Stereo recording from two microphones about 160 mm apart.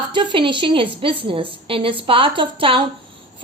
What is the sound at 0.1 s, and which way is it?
A woman's voice, 30° right (ahead or behind).